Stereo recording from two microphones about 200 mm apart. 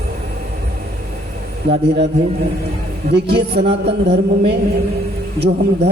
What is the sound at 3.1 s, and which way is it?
A man's voice, 55° right (ahead or behind).